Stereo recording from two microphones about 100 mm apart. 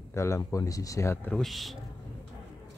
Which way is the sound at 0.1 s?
30° left (ahead or behind).